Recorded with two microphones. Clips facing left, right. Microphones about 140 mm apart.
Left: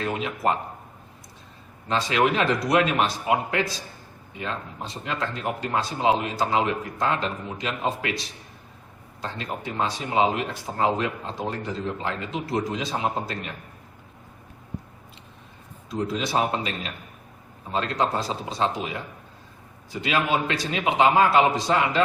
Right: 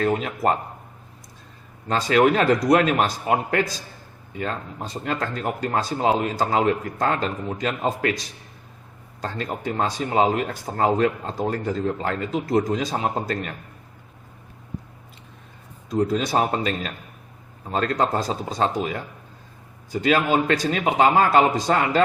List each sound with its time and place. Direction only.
0.0 s speech: 40° right (ahead or behind)
1.9 s speech: 45° right (ahead or behind)
15.9 s speech: 45° right (ahead or behind)